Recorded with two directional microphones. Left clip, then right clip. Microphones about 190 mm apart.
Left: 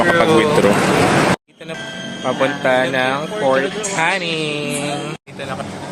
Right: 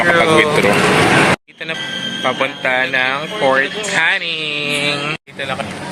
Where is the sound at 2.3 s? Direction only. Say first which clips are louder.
Left 1 dB; 5° left (ahead or behind).